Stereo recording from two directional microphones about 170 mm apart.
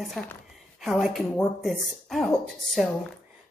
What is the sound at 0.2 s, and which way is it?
Speech, 5° left (ahead or behind).